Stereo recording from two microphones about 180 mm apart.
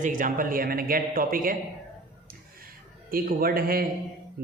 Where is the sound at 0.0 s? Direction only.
50° right (ahead or behind).